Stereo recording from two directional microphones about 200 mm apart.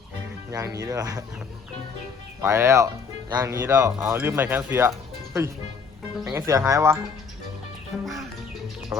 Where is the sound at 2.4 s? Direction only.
15° right (ahead or behind).